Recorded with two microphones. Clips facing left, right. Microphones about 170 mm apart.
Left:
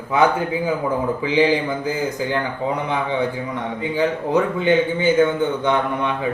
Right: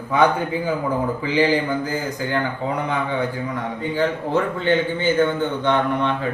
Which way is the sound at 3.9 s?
15° left (ahead or behind).